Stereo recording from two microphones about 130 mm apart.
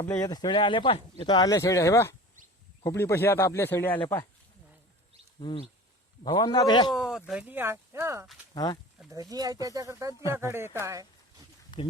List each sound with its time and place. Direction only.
0.0 s speech: 15° left (ahead or behind)
0.3 s speech: 30° left (ahead or behind); by 4.2 s 15° left (ahead or behind)
5.4 s speech: 40° left (ahead or behind)
6.9 s a sound: 5° right (ahead or behind)
7.3 s speech: 10° right (ahead or behind)
8.5 s speech: 35° left (ahead or behind)
9.3 s speech: 30° right (ahead or behind)
10.8 s a sound: 25° right (ahead or behind)
11.7 s speech: 35° left (ahead or behind)